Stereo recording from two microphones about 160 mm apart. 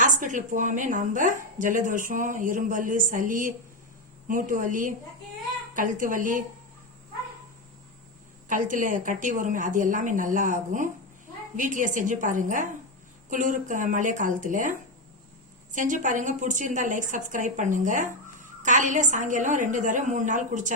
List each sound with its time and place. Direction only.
0.0 s a woman's voice: 55° right (ahead or behind)
8.4 s a woman's voice: 55° right (ahead or behind)